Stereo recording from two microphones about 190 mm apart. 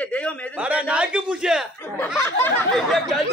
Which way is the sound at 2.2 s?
10° left (ahead or behind).